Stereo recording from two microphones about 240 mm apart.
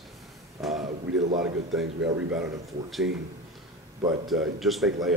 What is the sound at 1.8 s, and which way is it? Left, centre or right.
Speech, right.